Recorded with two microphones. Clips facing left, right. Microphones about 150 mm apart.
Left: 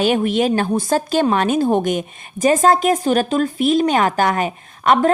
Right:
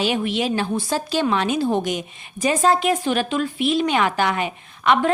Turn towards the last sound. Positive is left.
turn(degrees=40)  # may be behind; listen again after turning